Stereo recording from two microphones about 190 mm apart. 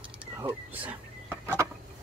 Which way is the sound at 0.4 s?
10° right (ahead or behind).